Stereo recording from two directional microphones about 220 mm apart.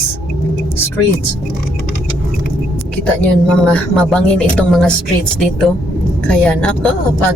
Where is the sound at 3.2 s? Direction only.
5° left (ahead or behind).